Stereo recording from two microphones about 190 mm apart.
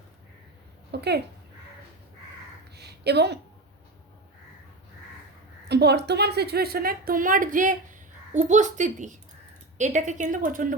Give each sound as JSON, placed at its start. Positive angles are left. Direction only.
{"t": 0.9, "sound": "speech", "side_deg": -60}
{"t": 2.7, "sound": "a sound", "side_deg": -60}
{"t": 5.6, "sound": "a woman's voice", "side_deg": -60}